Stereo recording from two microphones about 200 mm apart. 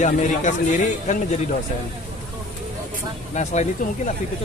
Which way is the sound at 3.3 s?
35° left (ahead or behind).